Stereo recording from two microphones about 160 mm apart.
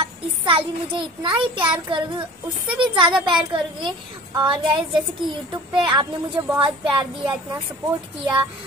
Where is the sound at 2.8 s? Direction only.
30° right (ahead or behind).